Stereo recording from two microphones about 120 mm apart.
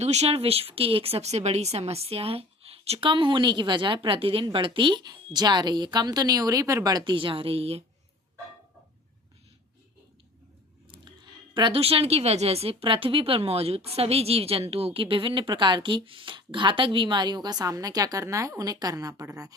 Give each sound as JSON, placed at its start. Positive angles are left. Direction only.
{"t": 0.0, "sound": "speech", "side_deg": -65}
{"t": 11.5, "sound": "speech", "side_deg": -45}